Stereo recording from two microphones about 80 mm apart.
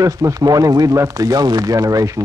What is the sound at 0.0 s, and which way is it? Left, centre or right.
Speech, right.